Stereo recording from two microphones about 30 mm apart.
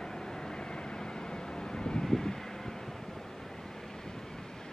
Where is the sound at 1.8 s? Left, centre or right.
Left.